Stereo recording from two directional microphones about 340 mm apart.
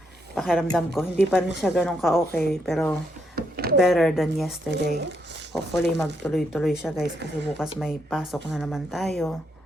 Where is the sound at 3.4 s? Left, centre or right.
Right.